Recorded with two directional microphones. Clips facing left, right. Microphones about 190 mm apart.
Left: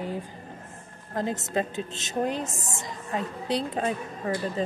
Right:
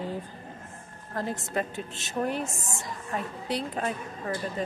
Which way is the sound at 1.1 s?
20° left (ahead or behind).